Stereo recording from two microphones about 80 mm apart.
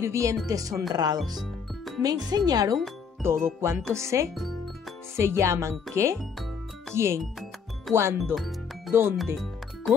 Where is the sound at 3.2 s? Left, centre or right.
Right.